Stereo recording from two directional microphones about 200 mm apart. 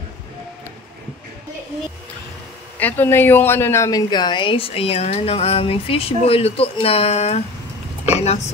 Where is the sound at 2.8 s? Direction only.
10° left (ahead or behind).